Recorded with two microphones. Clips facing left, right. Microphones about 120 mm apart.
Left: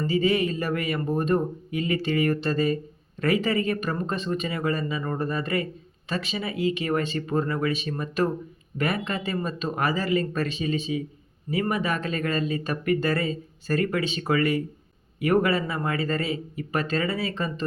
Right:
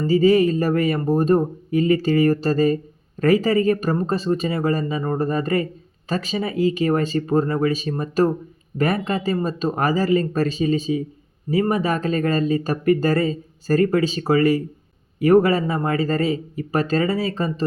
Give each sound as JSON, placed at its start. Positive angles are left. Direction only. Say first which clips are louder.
{"t": 0.1, "sound": "speech", "louder": "right 9 dB", "side_deg": -40}